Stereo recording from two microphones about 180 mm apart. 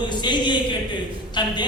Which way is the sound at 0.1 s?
25° left (ahead or behind).